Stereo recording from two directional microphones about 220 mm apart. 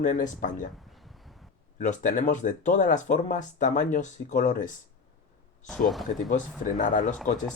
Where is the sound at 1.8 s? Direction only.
35° left (ahead or behind).